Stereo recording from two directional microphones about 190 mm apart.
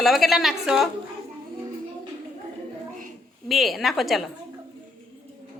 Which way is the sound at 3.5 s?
Centre (ahead or behind).